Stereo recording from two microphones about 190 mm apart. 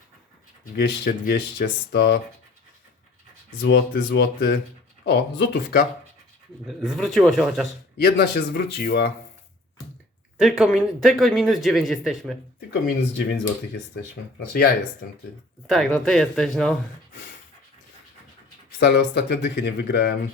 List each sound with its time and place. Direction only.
0.6 s speech: 50° left (ahead or behind)
3.6 s speech: 65° left (ahead or behind)
6.7 s speech: centre (ahead or behind)
7.9 s speech: 55° left (ahead or behind)
10.3 s speech: 5° right (ahead or behind)
13.9 s speech: 55° left (ahead or behind)
15.6 s speech: centre (ahead or behind)
18.8 s speech: 65° left (ahead or behind)